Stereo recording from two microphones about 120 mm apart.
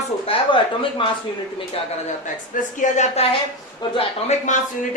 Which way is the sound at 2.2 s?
90° left.